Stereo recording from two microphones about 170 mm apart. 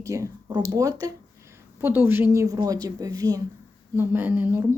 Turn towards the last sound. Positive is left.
turn(degrees=-10)  # may be behind; listen again after turning